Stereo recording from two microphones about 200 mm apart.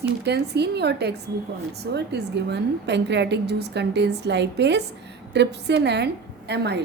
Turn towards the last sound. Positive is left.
turn(degrees=-60)  # may be behind; listen again after turning